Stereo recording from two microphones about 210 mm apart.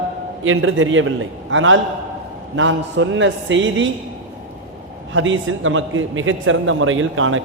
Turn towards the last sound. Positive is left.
turn(degrees=-70)  # may be behind; listen again after turning